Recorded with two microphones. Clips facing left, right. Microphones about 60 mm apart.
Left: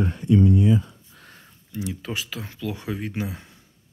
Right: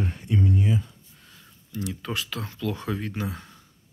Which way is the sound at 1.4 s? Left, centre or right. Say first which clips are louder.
Left 1 dB; centre.